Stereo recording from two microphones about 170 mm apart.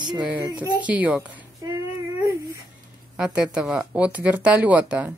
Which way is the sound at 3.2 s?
5° right (ahead or behind).